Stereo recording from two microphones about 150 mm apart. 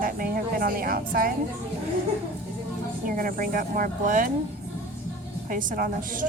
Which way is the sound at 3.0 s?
70° right (ahead or behind).